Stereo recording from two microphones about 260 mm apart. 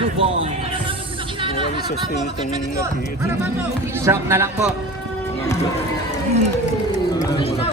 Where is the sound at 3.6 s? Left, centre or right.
Centre.